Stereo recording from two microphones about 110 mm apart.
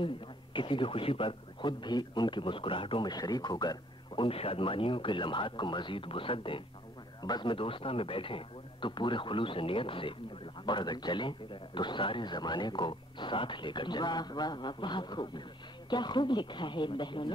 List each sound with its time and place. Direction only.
0.0 s a man's voice: 50° left (ahead or behind)
3.1 s a man's voice: 35° left (ahead or behind)